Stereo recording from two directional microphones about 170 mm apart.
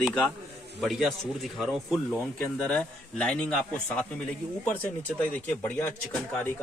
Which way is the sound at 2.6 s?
5° left (ahead or behind).